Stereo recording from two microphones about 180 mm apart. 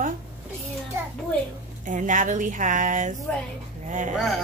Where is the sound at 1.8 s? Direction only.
45° right (ahead or behind).